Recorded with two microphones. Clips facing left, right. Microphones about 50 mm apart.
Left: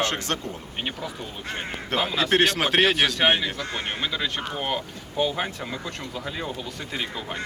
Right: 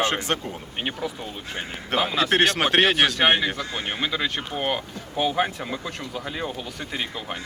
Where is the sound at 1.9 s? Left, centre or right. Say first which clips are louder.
Right 1 dB; centre.